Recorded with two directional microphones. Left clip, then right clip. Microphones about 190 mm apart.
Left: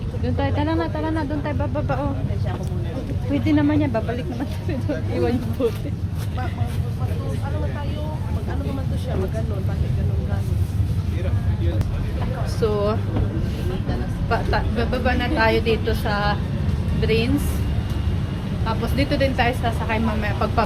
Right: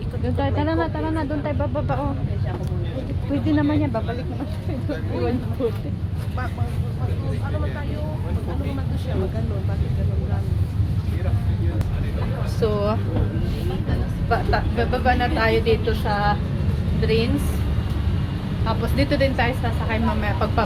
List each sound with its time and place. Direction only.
0.3 s speech: 20° right (ahead or behind)
3.5 s speech: 10° left (ahead or behind)
5.6 s speech: 20° left (ahead or behind)
12.5 s a woman's voice: centre (ahead or behind)
14.3 s a woman's voice: 10° left (ahead or behind)
18.6 s a woman's voice: centre (ahead or behind)